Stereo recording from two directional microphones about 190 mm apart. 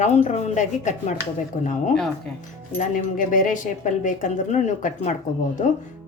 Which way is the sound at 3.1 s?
45° left (ahead or behind).